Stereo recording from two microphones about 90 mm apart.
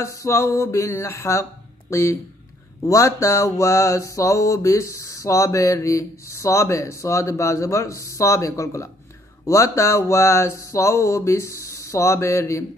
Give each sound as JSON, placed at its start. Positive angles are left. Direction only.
{"t": 0.0, "sound": "mantra", "side_deg": 35}